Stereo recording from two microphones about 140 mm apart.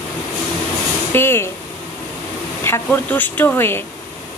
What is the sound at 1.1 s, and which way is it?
Speech, 15° left (ahead or behind).